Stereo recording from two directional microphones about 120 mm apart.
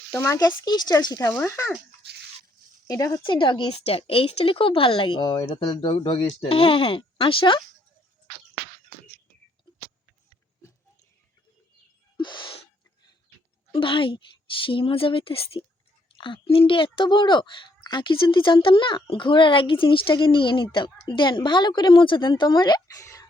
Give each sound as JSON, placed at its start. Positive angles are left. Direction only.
{"t": 0.2, "sound": "speech", "side_deg": 30}
{"t": 1.3, "sound": "speech", "side_deg": 20}
{"t": 2.8, "sound": "speech", "side_deg": 30}
{"t": 3.2, "sound": "speech", "side_deg": 40}
{"t": 3.8, "sound": "speech", "side_deg": 55}
{"t": 12.1, "sound": "gasp", "side_deg": 40}
{"t": 13.7, "sound": "speech", "side_deg": 45}